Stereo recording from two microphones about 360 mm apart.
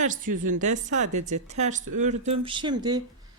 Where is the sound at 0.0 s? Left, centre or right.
Right.